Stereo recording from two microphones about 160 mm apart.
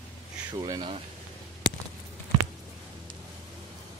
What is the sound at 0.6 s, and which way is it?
Speech, 25° right (ahead or behind).